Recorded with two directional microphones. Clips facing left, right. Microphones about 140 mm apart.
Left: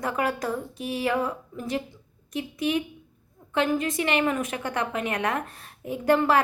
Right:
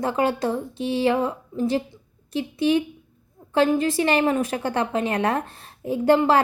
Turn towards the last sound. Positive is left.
turn(degrees=-30)  # may be behind; listen again after turning